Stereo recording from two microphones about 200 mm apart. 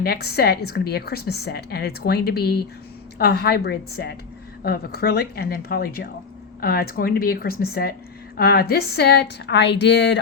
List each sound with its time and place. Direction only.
0.0 s a woman's voice: 50° left (ahead or behind)